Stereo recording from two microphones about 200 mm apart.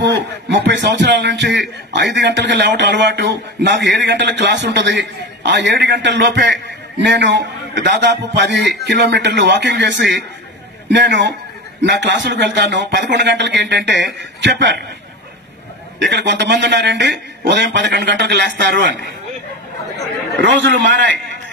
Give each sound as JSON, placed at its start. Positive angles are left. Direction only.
{"t": 0.0, "sound": "a man's voice", "side_deg": -60}
{"t": 16.0, "sound": "a man's voice", "side_deg": -60}
{"t": 20.3, "sound": "a man's voice", "side_deg": -65}